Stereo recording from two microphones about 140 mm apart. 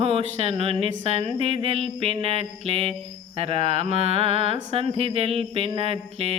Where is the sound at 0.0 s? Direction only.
45° right (ahead or behind).